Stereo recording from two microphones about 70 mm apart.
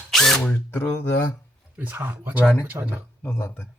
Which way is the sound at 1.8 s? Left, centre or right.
Right.